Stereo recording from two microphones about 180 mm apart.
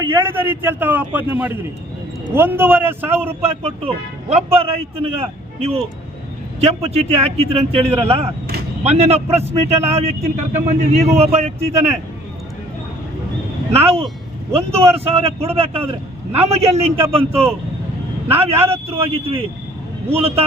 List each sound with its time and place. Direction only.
0.3 s a man's voice: 10° right (ahead or behind)
3.6 s speech: 35° right (ahead or behind)
14.5 s speech: 35° right (ahead or behind)